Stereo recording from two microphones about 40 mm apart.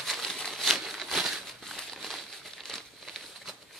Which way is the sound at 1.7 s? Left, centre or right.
Centre.